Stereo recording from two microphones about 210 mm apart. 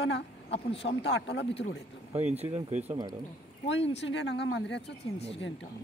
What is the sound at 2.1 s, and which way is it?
Speech, 30° right (ahead or behind).